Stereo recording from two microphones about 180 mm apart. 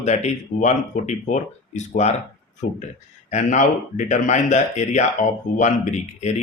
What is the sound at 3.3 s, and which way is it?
Speech, 45° left (ahead or behind).